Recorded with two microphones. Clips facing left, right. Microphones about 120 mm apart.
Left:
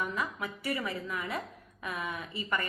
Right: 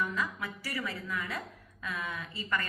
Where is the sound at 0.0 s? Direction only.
20° left (ahead or behind).